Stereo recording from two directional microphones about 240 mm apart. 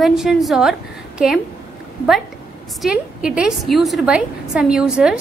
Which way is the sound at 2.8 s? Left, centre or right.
Centre.